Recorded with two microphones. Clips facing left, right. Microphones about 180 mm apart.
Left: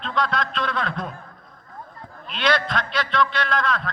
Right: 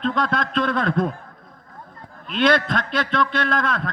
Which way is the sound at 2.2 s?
50° right (ahead or behind).